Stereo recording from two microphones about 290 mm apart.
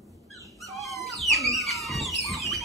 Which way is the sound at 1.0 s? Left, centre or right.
Centre.